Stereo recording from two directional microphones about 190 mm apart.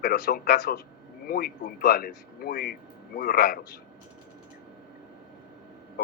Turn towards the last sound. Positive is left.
turn(degrees=55)  # may be behind; listen again after turning